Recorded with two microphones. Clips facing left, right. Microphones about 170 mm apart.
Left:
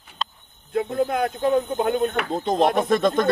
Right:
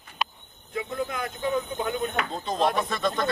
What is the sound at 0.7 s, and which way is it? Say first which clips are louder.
Speech: left 8 dB; 55° left (ahead or behind).